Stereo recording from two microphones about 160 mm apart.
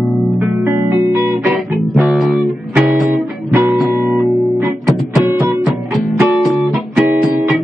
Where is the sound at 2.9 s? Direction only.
10° right (ahead or behind).